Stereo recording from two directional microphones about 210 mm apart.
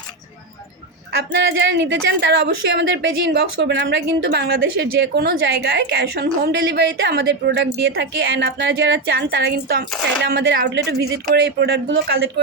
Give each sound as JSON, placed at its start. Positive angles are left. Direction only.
{"t": 1.1, "sound": "a woman's voice", "side_deg": -55}